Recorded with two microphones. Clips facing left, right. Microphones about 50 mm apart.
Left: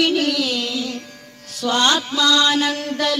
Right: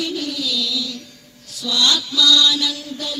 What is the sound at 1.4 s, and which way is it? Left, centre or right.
Mantra, left.